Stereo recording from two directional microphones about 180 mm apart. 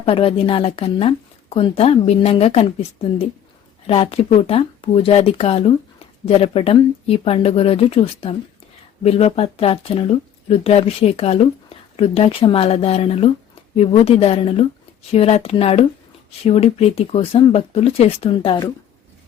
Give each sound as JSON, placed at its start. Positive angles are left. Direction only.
{"t": 0.0, "sound": "a woman's voice", "side_deg": 30}
{"t": 3.8, "sound": "a woman's voice", "side_deg": 30}